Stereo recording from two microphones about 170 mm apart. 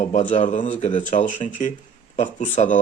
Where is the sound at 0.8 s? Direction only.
30° left (ahead or behind).